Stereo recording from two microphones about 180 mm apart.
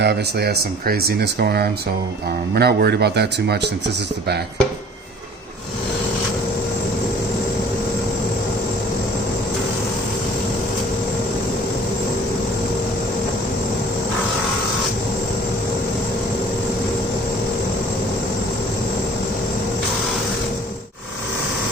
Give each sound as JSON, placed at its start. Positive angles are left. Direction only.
{"t": 0.0, "sound": "speech", "side_deg": -65}